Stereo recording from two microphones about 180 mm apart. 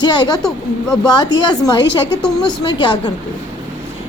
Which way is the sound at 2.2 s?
5° left (ahead or behind).